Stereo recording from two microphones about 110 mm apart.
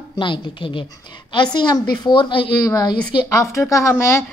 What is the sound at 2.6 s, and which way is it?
A woman's voice, 30° left (ahead or behind).